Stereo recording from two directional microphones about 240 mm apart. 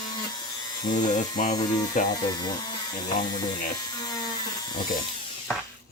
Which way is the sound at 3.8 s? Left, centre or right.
Centre.